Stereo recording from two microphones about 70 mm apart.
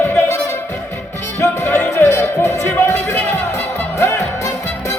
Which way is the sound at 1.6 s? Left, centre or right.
Left.